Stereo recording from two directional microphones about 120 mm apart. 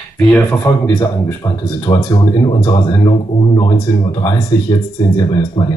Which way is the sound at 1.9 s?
35° left (ahead or behind).